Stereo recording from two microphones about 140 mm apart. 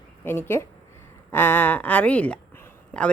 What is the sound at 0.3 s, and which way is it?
A woman's voice, 15° left (ahead or behind).